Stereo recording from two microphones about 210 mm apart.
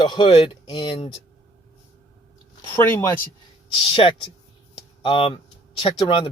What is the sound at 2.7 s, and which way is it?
Speech, 15° left (ahead or behind).